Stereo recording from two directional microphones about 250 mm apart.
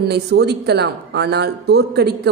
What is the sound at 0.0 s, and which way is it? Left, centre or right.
A man's voice, right.